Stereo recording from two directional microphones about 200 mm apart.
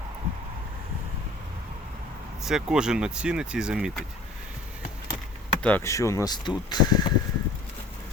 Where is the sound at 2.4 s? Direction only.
5° right (ahead or behind).